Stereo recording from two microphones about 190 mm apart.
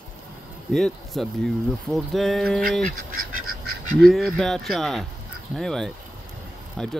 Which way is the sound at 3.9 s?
Centre (ahead or behind).